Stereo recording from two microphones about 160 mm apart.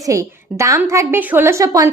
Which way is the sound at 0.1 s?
20° right (ahead or behind).